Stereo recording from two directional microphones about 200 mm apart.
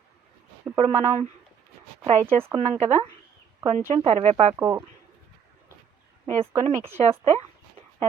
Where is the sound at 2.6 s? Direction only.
30° right (ahead or behind).